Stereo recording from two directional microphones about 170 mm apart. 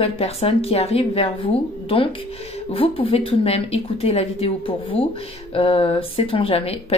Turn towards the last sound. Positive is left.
turn(degrees=35)  # may be behind; listen again after turning